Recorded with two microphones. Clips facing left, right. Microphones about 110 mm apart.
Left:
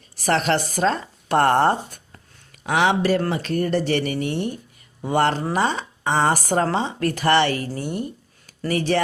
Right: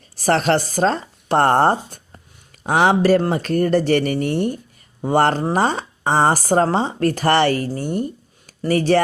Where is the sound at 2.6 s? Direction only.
40° right (ahead or behind).